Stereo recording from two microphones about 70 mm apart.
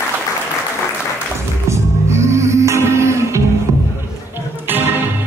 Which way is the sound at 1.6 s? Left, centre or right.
Right.